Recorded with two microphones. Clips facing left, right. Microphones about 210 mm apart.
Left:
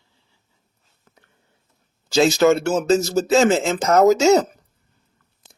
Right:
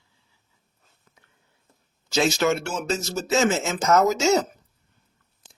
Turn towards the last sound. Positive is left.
turn(degrees=40)  # may be behind; listen again after turning